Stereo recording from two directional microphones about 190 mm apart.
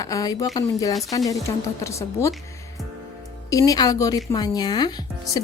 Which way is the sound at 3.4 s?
20° left (ahead or behind).